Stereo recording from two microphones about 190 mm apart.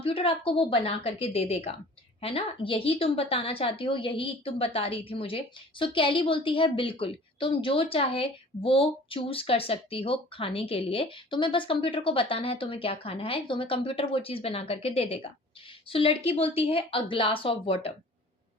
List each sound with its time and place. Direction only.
0.0 s a woman's voice: 30° left (ahead or behind)